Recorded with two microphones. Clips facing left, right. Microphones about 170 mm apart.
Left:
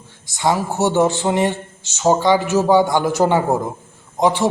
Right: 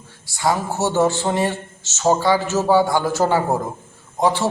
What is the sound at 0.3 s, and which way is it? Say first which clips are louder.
A man's voice: left 2 dB; 20° left (ahead or behind).